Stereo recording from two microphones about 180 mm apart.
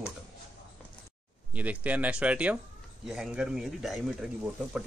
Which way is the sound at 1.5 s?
10° right (ahead or behind).